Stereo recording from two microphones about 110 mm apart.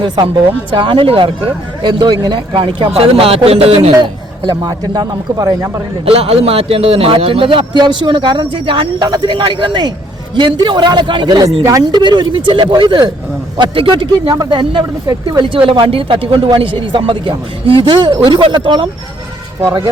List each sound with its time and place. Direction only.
0.0 s a man's voice: 45° right (ahead or behind); by 3.9 s 65° right (ahead or behind)
3.9 s a man's voice: 35° right (ahead or behind)
6.1 s a man's voice: 65° right (ahead or behind); by 18.9 s 45° right (ahead or behind)